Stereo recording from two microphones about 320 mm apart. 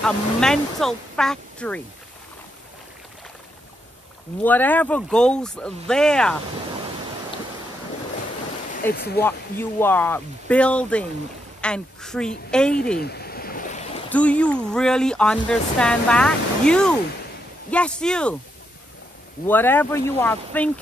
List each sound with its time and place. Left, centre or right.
0.0 s speech: centre
4.4 s speech: centre
8.9 s speech: left
9.2 s speech: centre
13.0 s stream: left
14.0 s speech: centre
19.4 s speech: centre